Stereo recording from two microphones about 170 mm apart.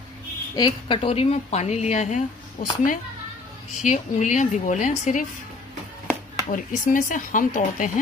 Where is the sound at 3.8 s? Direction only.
45° left (ahead or behind).